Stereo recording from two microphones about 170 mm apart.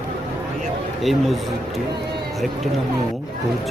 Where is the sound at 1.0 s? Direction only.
Centre (ahead or behind).